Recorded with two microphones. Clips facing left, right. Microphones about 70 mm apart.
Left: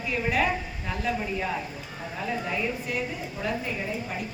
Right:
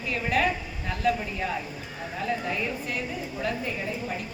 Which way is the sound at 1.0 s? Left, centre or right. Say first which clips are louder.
Right 5 dB; centre.